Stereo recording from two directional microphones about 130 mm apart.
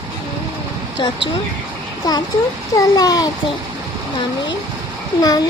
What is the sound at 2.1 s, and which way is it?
A child's voice, 30° left (ahead or behind).